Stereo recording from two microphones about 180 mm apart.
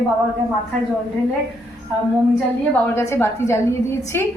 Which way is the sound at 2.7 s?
15° left (ahead or behind).